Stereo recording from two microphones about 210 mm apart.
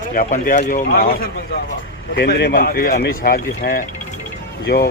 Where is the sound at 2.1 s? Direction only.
50° left (ahead or behind).